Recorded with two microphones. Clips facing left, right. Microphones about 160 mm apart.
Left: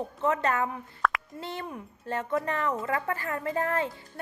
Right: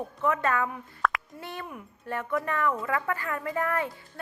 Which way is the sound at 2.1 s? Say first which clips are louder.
Left 1 dB; 25° left (ahead or behind).